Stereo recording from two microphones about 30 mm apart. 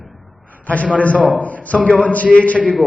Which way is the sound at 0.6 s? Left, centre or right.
Left.